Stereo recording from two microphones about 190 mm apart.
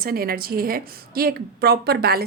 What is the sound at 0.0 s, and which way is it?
A woman's voice, 50° right (ahead or behind).